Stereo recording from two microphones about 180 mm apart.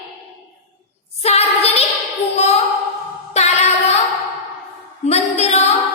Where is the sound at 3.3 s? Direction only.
40° left (ahead or behind).